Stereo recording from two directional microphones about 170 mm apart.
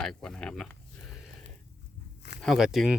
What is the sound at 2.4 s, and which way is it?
Speech, centre (ahead or behind).